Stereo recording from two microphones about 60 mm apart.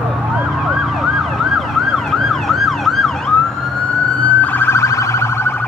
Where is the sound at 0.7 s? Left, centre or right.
Centre.